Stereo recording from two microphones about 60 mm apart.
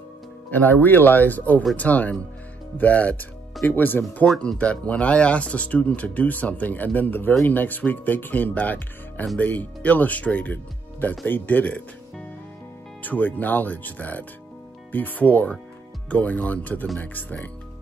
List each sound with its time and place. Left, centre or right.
0.5 s speech: left
4.4 s speech: centre
13.0 s speech: left